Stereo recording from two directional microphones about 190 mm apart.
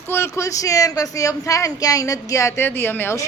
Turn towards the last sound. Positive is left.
turn(degrees=10)  # may be behind; listen again after turning